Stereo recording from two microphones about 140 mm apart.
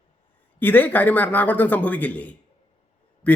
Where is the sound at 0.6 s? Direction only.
10° left (ahead or behind).